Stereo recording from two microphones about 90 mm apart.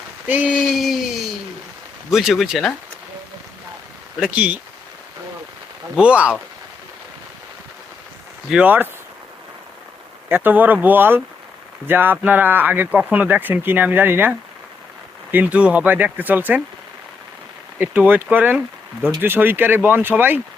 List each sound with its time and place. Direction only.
0.3 s speech: 20° right (ahead or behind)
0.5 s a sound: 5° right (ahead or behind)
2.0 s speech: 5° right (ahead or behind)
4.2 s speech: 15° right (ahead or behind)
6.0 s speech: 15° right (ahead or behind)
8.6 s speech: 20° right (ahead or behind)
10.2 s speech: 20° right (ahead or behind)
17.7 s speech: 20° right (ahead or behind)